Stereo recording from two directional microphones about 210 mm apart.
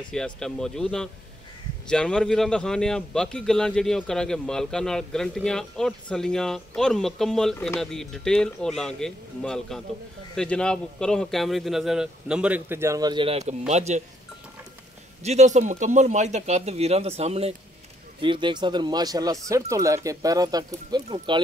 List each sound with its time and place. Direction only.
0.1 s speech: centre (ahead or behind); by 14.0 s 30° right (ahead or behind)
15.2 s speech: 35° right (ahead or behind)